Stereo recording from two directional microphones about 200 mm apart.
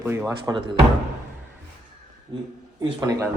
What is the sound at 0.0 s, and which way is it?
Speech, 10° right (ahead or behind).